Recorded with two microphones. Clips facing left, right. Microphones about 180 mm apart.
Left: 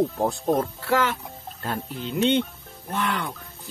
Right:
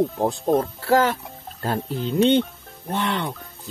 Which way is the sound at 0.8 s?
35° right (ahead or behind).